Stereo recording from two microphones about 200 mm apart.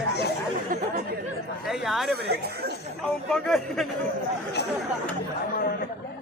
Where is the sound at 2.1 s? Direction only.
55° right (ahead or behind).